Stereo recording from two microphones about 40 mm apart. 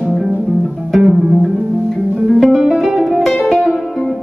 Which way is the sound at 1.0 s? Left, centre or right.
Centre.